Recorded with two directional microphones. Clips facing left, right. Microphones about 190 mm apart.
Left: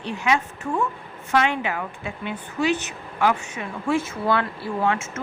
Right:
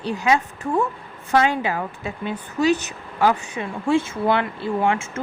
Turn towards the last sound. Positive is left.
turn(degrees=-30)  # may be behind; listen again after turning